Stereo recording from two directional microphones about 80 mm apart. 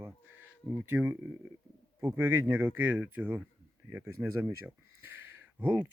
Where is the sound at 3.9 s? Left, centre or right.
Right.